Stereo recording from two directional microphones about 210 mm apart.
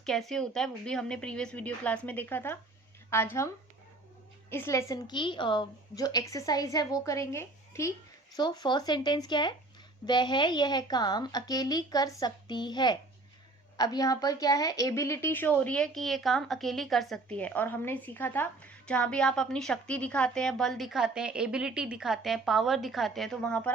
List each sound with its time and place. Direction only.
0.0 s a woman's voice: centre (ahead or behind)